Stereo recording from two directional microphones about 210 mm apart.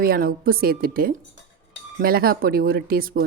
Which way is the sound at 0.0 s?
45° right (ahead or behind).